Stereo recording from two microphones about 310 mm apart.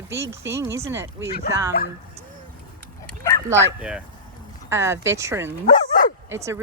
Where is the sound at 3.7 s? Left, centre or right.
Centre.